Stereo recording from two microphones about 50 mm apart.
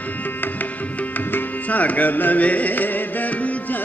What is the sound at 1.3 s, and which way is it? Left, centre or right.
Music, left.